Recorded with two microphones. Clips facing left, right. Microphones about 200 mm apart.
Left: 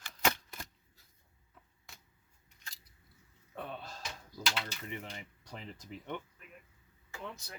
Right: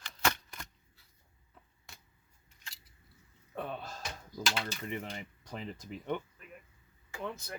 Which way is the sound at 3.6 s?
50° right (ahead or behind).